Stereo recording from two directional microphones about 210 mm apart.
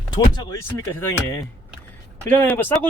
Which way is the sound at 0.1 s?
15° left (ahead or behind).